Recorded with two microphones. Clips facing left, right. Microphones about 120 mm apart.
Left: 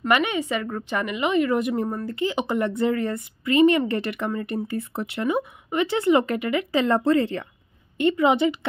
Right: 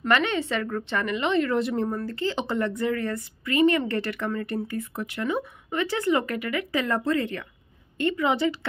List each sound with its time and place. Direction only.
0.1 s a woman's voice: 10° left (ahead or behind)
2.7 s a woman's voice: 25° left (ahead or behind)